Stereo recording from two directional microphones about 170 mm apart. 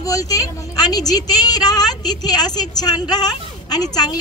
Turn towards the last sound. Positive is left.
turn(degrees=25)  # may be behind; listen again after turning